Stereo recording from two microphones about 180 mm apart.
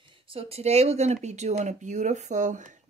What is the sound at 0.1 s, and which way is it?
Speech, 30° right (ahead or behind).